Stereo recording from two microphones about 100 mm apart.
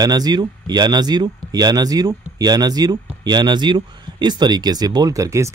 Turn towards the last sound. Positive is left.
turn(degrees=-30)  # may be behind; listen again after turning